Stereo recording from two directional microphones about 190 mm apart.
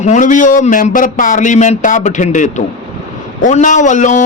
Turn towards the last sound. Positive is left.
turn(degrees=40)  # may be behind; listen again after turning